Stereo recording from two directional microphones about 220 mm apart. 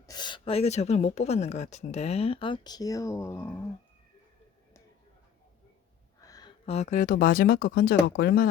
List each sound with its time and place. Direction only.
0.0 s speech: 20° left (ahead or behind)
6.2 s a sound: 15° left (ahead or behind)
6.7 s speech: 30° left (ahead or behind)